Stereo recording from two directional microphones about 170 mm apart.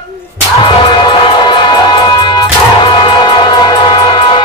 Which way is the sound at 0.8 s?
25° left (ahead or behind).